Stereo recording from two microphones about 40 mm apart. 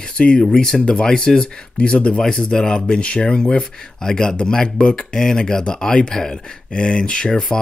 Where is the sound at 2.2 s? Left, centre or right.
Centre.